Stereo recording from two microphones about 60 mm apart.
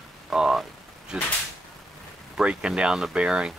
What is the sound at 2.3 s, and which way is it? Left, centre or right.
Speech, centre.